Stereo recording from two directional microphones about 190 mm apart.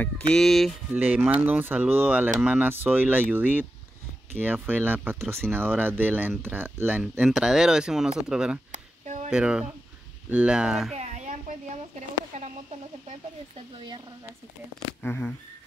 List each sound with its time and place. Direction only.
0.3 s speech: centre (ahead or behind)
0.9 s speech: 10° right (ahead or behind)
8.7 s a sound: 40° right (ahead or behind)
9.3 s speech: 5° right (ahead or behind)
11.0 s a sound: 35° right (ahead or behind)
13.7 s a woman's voice: 25° right (ahead or behind)
15.0 s speech: 10° left (ahead or behind)